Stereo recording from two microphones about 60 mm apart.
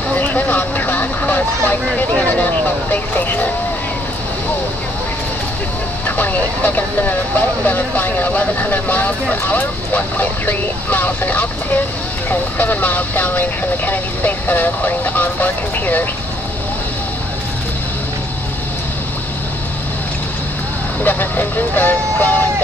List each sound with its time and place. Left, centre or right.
0.1 s a sound: left
1.7 s speech: left
6.0 s speech: left
21.0 s speech: left